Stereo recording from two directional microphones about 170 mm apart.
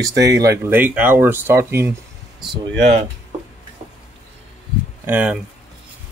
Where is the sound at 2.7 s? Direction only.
90° right.